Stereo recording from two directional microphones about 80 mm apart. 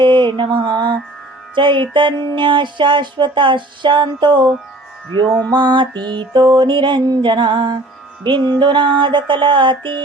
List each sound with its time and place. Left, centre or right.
0.0 s mantra: right
1.5 s music: right
5.5 s music: right
6.1 s music: right